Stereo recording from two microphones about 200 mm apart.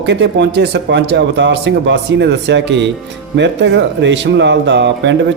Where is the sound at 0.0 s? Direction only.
60° right (ahead or behind).